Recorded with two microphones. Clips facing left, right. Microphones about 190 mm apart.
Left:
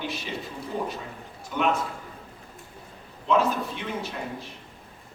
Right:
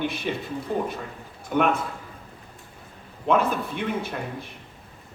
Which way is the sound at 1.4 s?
55° right (ahead or behind).